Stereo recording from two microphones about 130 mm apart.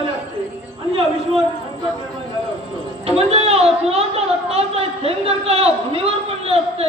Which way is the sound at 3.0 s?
50° right (ahead or behind).